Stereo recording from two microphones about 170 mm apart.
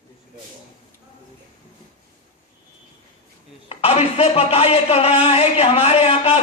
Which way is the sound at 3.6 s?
35° left (ahead or behind).